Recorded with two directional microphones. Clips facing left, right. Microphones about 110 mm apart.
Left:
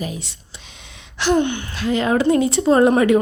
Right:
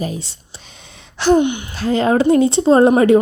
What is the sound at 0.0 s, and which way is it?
Speech, 35° right (ahead or behind).